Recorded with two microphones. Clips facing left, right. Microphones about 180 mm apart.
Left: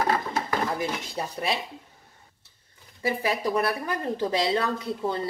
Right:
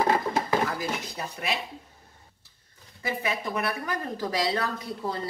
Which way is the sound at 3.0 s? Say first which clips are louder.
Left 4 dB; 30° left (ahead or behind).